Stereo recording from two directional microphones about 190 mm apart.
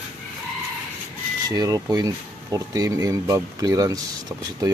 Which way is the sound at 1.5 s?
20° right (ahead or behind).